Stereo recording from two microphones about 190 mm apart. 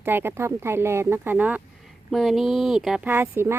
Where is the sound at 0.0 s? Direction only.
10° right (ahead or behind).